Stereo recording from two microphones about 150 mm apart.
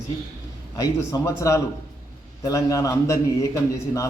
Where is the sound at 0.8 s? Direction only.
25° left (ahead or behind).